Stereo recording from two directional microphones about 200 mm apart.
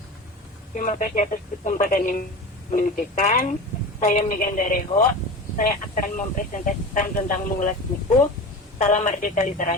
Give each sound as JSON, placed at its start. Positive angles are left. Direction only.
{"t": 0.7, "sound": "speech", "side_deg": 40}
{"t": 8.8, "sound": "speech", "side_deg": 40}